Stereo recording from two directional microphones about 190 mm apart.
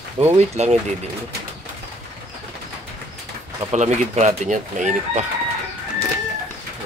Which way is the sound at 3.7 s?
35° right (ahead or behind).